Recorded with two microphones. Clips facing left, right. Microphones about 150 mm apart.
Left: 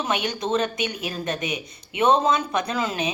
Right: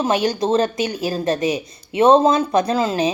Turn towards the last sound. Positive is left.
turn(degrees=-35)  # may be behind; listen again after turning